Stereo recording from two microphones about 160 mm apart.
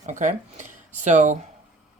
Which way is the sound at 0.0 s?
50° right (ahead or behind).